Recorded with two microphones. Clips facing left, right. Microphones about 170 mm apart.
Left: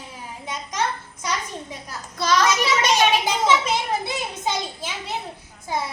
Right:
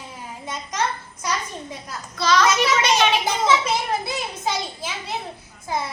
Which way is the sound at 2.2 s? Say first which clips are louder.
Right 1 dB; 45° left (ahead or behind).